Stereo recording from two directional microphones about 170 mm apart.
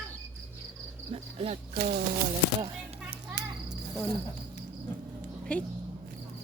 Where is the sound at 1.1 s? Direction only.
35° right (ahead or behind).